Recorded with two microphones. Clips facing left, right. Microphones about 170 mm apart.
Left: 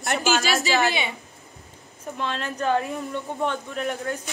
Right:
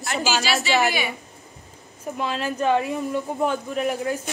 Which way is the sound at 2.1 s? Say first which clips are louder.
Right 3 dB; 5° right (ahead or behind).